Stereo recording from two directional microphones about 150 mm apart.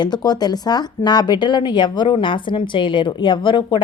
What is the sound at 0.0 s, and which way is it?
A woman's voice, 25° left (ahead or behind).